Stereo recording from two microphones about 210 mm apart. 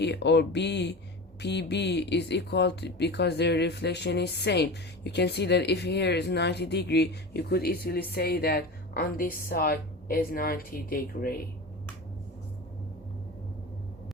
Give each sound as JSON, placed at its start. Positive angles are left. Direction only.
{"t": 0.0, "sound": "speech", "side_deg": 55}